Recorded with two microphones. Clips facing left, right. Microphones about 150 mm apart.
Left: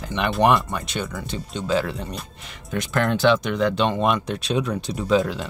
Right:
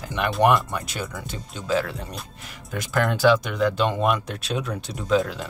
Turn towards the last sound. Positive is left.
turn(degrees=0)  # may be behind; listen again after turning